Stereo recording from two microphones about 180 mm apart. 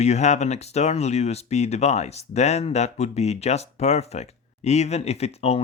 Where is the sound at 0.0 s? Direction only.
40° left (ahead or behind).